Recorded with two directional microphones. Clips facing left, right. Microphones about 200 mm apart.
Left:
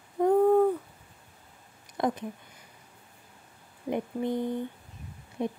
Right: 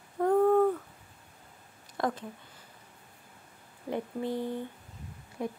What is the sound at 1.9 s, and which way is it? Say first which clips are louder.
Speech: left 3 dB; 20° left (ahead or behind).